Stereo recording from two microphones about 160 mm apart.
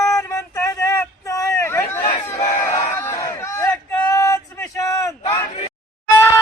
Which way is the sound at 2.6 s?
15° left (ahead or behind).